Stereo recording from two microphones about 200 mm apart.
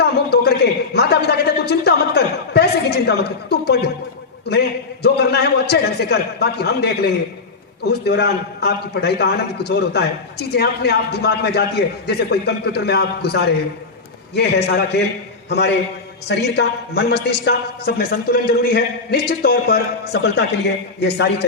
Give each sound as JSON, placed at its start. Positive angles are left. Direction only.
{"t": 0.0, "sound": "a man's voice", "side_deg": 55}
{"t": 5.0, "sound": "a man's voice", "side_deg": 55}
{"t": 21.0, "sound": "a man's voice", "side_deg": 55}